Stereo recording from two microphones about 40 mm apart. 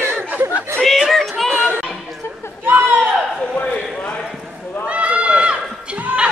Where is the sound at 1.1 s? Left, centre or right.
Centre.